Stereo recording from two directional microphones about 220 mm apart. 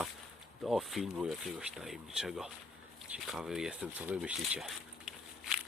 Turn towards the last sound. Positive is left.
turn(degrees=0)  # may be behind; listen again after turning